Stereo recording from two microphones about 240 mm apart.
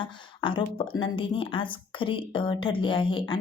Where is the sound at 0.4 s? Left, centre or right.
Left.